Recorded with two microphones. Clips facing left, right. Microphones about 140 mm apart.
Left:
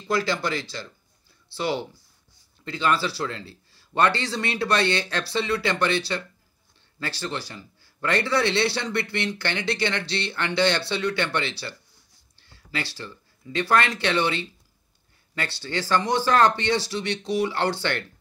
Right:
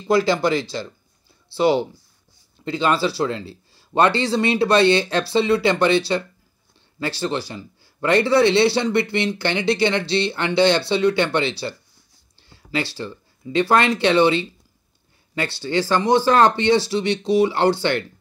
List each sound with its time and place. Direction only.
0.1 s speech: 15° right (ahead or behind)
12.4 s a sound: 20° right (ahead or behind)
12.9 s speech: 20° right (ahead or behind)
15.6 s speech: 20° right (ahead or behind)